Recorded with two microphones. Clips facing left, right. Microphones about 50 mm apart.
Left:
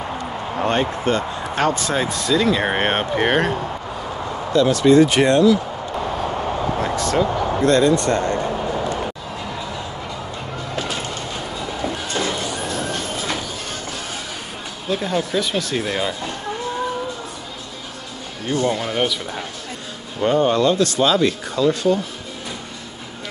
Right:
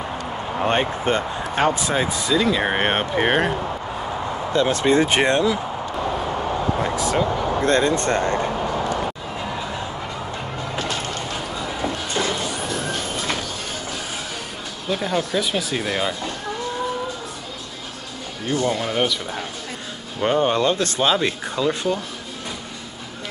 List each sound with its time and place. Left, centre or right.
0.7 s speech: right; by 3.5 s centre
4.5 s speech: right
6.8 s speech: centre
7.6 s speech: right
10.8 s vehicle: centre
14.9 s speech: centre
18.5 s speech: centre
20.2 s speech: centre